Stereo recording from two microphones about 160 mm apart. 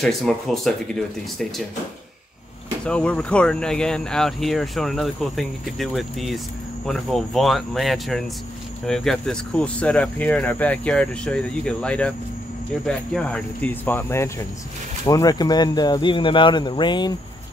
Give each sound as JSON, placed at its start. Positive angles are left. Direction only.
{"t": 0.0, "sound": "speech", "side_deg": 0}
{"t": 2.8, "sound": "speech", "side_deg": 5}